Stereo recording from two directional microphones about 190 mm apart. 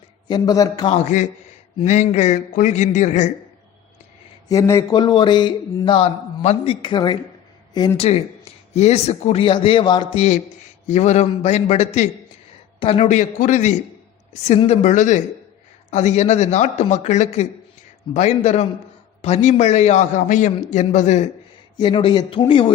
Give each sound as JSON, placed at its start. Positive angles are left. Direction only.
{"t": 0.3, "sound": "speech", "side_deg": 20}
{"t": 0.9, "sound": "a man's voice", "side_deg": 40}
{"t": 4.4, "sound": "a man's voice", "side_deg": 15}
{"t": 10.8, "sound": "a man's voice", "side_deg": 35}
{"t": 21.8, "sound": "speech", "side_deg": 25}